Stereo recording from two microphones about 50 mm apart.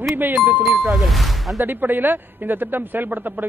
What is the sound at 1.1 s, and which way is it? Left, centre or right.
Speech, centre.